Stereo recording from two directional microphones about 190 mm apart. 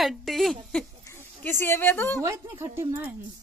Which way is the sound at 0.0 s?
Centre (ahead or behind).